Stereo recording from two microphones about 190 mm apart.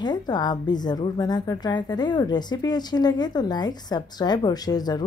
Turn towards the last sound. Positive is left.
turn(degrees=20)  # may be behind; listen again after turning